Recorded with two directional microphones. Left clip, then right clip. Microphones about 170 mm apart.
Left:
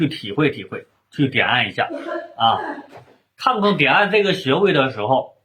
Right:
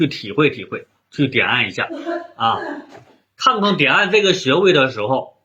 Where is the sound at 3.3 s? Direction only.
15° left (ahead or behind).